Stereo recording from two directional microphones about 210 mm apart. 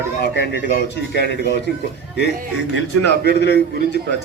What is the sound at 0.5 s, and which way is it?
A man's voice, 55° left (ahead or behind).